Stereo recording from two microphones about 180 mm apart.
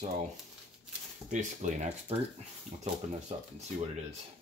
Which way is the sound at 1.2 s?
40° right (ahead or behind).